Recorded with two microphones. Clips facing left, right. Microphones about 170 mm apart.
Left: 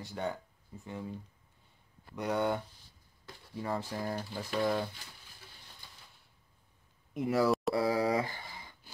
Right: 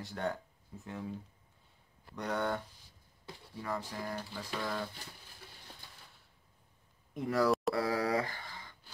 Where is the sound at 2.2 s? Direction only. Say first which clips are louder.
Left 3 dB; 10° left (ahead or behind).